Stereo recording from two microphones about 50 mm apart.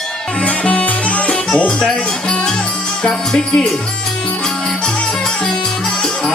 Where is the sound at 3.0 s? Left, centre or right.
Centre.